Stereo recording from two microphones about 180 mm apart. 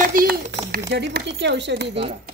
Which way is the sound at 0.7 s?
65° right (ahead or behind).